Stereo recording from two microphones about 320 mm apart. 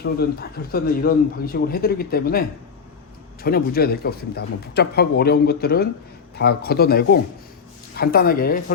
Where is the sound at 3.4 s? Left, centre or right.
Left.